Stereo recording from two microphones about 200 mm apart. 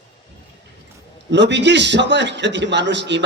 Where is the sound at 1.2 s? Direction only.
60° right (ahead or behind).